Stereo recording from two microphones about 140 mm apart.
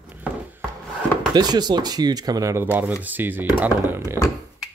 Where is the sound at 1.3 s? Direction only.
30° right (ahead or behind); by 3.4 s 15° right (ahead or behind).